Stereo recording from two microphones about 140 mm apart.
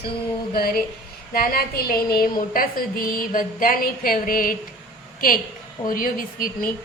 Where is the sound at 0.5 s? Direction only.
90° left.